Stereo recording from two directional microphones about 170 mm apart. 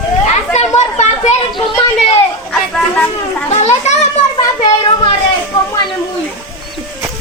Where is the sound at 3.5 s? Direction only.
40° left (ahead or behind).